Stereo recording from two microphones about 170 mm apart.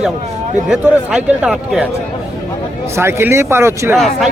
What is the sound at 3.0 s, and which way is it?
Speech, 15° right (ahead or behind).